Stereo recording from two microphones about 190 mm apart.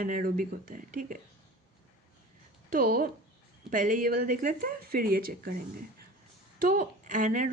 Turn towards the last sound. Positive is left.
turn(degrees=-45)  # may be behind; listen again after turning